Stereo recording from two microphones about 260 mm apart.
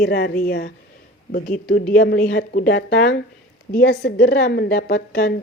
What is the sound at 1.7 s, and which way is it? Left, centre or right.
A woman's voice, left.